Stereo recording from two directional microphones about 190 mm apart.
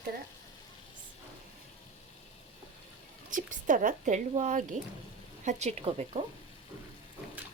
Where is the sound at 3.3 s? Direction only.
45° right (ahead or behind).